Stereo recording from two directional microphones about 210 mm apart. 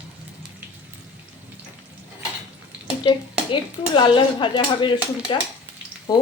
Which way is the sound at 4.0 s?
25° left (ahead or behind).